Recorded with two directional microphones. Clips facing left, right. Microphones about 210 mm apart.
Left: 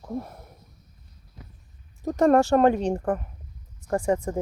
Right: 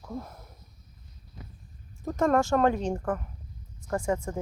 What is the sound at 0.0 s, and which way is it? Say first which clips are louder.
Speech: left 5 dB; 25° left (ahead or behind).